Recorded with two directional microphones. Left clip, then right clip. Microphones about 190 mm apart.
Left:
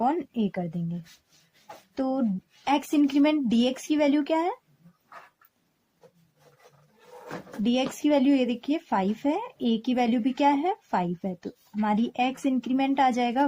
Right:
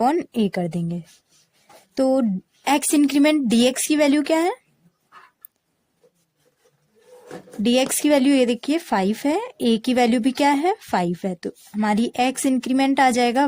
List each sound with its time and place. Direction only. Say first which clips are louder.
0.0 s speech: right 6 dB; 40° right (ahead or behind)
2.0 s speech: right 9 dB; 40° right (ahead or behind)
7.6 s speech: right 7 dB; 40° right (ahead or behind)